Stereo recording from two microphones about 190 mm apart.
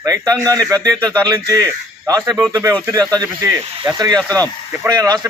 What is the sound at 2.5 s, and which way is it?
Speech, 15° right (ahead or behind).